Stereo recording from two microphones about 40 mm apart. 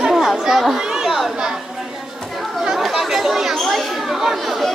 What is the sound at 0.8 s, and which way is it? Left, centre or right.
Chatter, centre.